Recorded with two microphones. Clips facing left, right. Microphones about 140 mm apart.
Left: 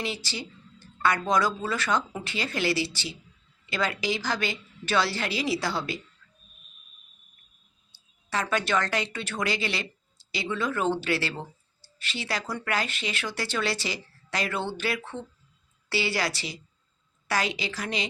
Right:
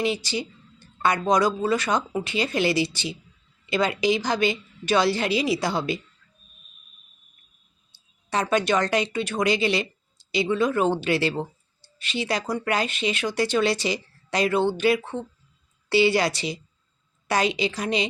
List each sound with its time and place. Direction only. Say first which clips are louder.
0.0 s a woman's voice: right 8 dB; 15° right (ahead or behind)
7.9 s a woman's voice: right 4 dB; 20° right (ahead or behind)